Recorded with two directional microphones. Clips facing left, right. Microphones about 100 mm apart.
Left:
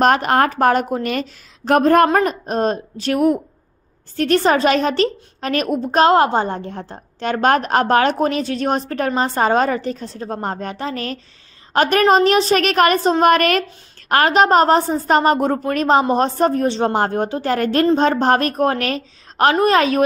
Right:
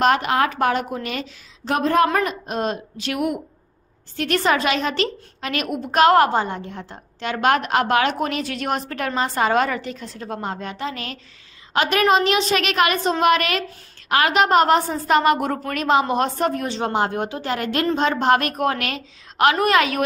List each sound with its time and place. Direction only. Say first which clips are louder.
0.0 s a woman's voice: left 3 dB; 45° left (ahead or behind)
2.0 s a woman's voice: left 5 dB; 35° left (ahead or behind)